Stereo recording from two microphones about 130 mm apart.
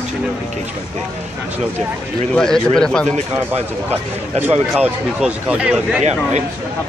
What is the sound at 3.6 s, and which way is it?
Speech, 55° right (ahead or behind).